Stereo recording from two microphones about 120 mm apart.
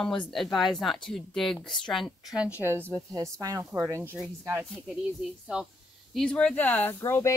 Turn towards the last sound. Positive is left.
turn(degrees=20)  # may be behind; listen again after turning